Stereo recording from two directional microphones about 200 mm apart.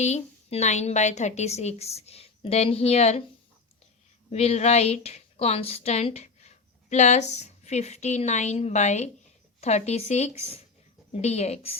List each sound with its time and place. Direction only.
0.0 s a woman's voice: 35° left (ahead or behind)
4.3 s a woman's voice: 30° left (ahead or behind)